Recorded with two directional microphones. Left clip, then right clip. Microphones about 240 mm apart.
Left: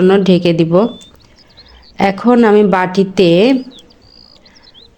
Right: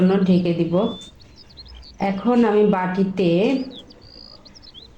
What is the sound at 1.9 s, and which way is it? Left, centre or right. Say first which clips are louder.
Speech: left 9 dB; left.